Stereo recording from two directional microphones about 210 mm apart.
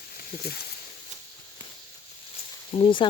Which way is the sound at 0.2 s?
45° left (ahead or behind).